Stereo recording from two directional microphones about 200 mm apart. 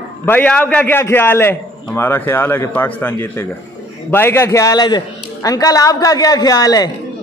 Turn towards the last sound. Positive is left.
turn(degrees=20)  # may be behind; listen again after turning